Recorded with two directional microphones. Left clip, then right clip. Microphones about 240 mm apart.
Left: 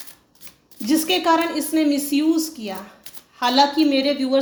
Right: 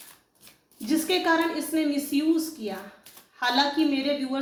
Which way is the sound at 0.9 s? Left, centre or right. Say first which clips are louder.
Left 6 dB; left.